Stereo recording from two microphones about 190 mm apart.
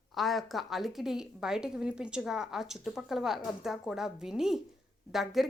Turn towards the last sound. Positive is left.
turn(degrees=0)  # may be behind; listen again after turning